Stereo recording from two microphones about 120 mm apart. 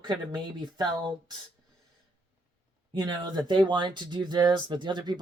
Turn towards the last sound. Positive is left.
turn(degrees=-35)  # may be behind; listen again after turning